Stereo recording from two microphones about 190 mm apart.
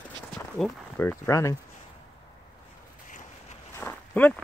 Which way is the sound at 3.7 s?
10° left (ahead or behind).